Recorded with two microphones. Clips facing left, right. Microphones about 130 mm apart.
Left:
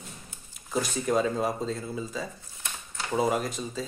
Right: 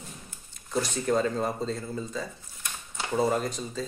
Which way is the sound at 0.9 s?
5° left (ahead or behind).